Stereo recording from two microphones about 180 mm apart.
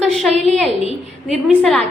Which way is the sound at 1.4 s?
Centre (ahead or behind).